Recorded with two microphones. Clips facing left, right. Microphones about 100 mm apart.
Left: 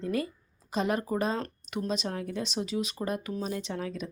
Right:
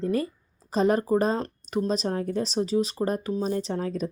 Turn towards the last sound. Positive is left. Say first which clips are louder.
# right 6 dB
turn(degrees=-40)  # may be behind; listen again after turning